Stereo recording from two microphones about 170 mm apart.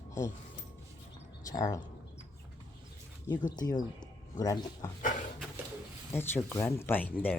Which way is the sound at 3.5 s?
25° left (ahead or behind).